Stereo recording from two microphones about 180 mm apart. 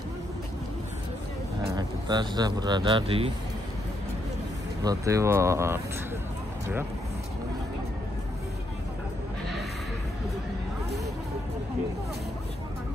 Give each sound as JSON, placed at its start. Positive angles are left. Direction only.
{"t": 1.8, "sound": "speech", "side_deg": -25}
{"t": 4.8, "sound": "speech", "side_deg": -15}